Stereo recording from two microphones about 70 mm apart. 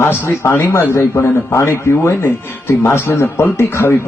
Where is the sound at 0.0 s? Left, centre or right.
Left.